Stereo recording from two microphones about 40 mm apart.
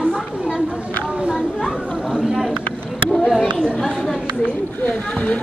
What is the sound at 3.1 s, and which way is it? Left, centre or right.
A child's voice, centre.